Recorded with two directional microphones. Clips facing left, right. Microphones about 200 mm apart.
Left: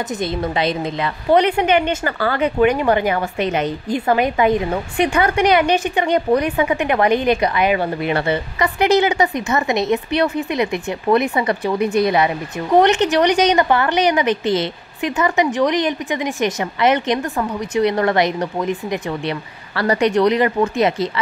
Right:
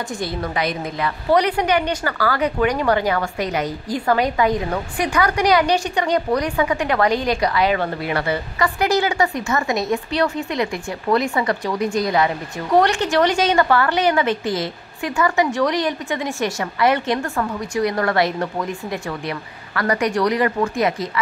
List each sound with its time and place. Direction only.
0.2 s a woman's voice: 25° left (ahead or behind)
11.8 s speech: 60° left (ahead or behind)
12.7 s a woman's voice: 20° left (ahead or behind)